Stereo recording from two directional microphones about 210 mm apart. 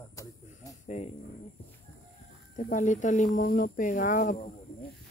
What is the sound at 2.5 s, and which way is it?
Speech, 35° left (ahead or behind).